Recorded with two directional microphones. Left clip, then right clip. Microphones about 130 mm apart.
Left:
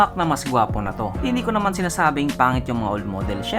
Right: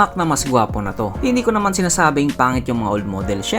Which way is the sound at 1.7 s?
50° right (ahead or behind).